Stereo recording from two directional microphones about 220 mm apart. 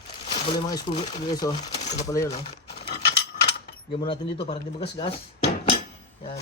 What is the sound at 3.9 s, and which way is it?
Speech, 25° left (ahead or behind).